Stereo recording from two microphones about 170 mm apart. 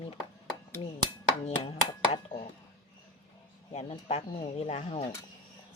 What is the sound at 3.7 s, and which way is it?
Speech, 40° left (ahead or behind).